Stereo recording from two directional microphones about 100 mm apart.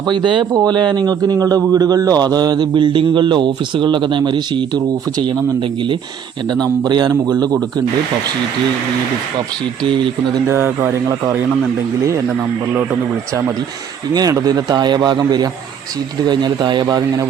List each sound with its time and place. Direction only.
0.1 s speech: 50° right (ahead or behind)
6.5 s speech: 45° right (ahead or behind)
9.8 s speech: 55° right (ahead or behind)
10.5 s speech: 25° right (ahead or behind)
14.1 s speech: 40° right (ahead or behind)